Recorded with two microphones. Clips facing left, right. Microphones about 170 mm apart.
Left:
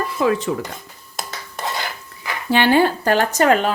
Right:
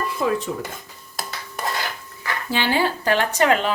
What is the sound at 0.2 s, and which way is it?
Dishes, 85° left.